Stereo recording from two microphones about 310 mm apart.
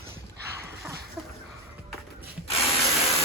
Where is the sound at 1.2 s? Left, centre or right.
Centre.